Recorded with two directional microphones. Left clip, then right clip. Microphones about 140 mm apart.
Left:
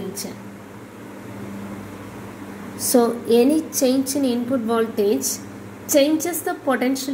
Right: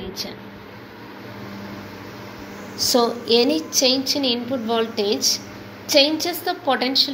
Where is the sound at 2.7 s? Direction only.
60° left (ahead or behind).